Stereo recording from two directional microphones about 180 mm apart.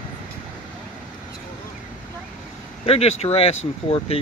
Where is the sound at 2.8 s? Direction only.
35° left (ahead or behind).